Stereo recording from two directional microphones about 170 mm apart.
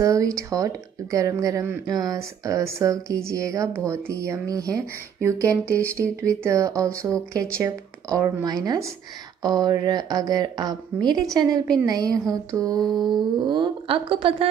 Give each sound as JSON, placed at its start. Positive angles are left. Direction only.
{"t": 0.0, "sound": "speech", "side_deg": -20}